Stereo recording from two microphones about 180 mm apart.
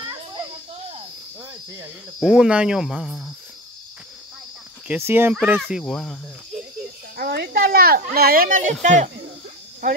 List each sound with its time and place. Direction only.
2.1 s speech: 5° right (ahead or behind)
4.8 s speech: 10° right (ahead or behind)
7.2 s speech: 60° right (ahead or behind); by 9.1 s 40° right (ahead or behind)